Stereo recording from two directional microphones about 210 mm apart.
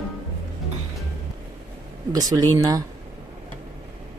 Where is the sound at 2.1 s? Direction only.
15° right (ahead or behind).